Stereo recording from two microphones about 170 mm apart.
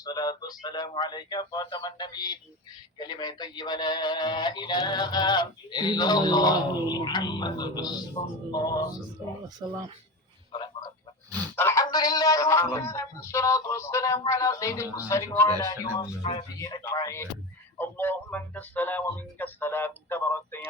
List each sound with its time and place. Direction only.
0.0 s speech: 25° left (ahead or behind)
9.6 s speech: 25° right (ahead or behind)
10.5 s frog: 25° left (ahead or behind)
11.5 s speech: 15° left (ahead or behind)